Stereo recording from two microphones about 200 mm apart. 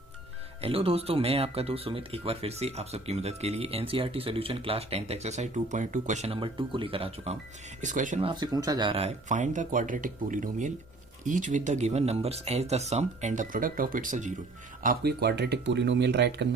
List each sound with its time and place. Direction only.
0.6 s speech: 30° right (ahead or behind)
7.8 s speech: 40° right (ahead or behind)
8.2 s speech: 20° right (ahead or behind); by 14.3 s 40° right (ahead or behind)
14.8 s speech: 55° right (ahead or behind)